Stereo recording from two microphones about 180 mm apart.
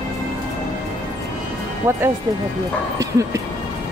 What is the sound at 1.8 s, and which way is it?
Speech, 15° right (ahead or behind).